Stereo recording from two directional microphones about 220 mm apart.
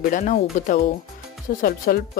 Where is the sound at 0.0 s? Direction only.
35° left (ahead or behind).